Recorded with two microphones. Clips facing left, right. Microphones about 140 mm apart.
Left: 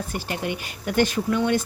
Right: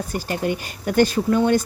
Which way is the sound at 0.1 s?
40° right (ahead or behind).